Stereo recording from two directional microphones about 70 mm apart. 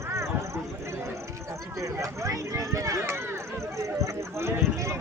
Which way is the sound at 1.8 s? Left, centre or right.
Right.